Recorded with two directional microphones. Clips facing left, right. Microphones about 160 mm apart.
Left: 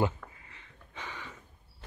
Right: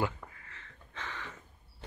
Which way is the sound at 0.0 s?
20° left (ahead or behind).